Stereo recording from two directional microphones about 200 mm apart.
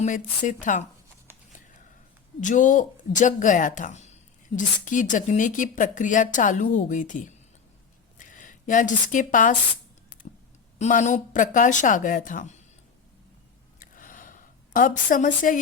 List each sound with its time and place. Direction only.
0.4 s a woman's voice: 40° left (ahead or behind)
2.4 s a woman's voice: 40° left (ahead or behind)
10.8 s a woman's voice: 35° left (ahead or behind)
13.7 s a sound: 40° left (ahead or behind)